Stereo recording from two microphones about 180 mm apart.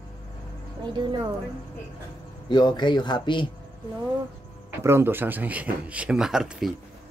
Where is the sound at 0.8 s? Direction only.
25° right (ahead or behind).